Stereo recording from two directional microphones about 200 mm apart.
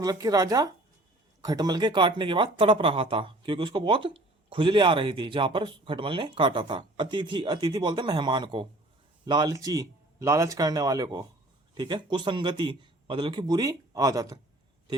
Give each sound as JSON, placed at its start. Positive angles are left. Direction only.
{"t": 0.0, "sound": "speech", "side_deg": -20}